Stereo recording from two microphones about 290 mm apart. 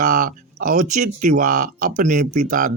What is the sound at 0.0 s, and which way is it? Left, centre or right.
Speech, right.